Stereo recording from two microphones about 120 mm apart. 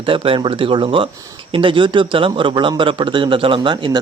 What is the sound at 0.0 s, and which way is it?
A man's voice, 45° right (ahead or behind).